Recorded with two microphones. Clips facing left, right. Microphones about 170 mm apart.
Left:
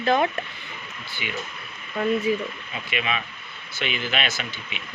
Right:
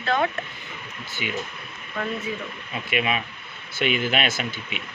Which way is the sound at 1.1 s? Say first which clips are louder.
Right 3 dB; 45° right (ahead or behind).